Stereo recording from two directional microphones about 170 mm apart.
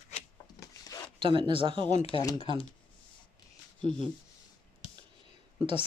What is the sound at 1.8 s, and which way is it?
Speech, 40° left (ahead or behind).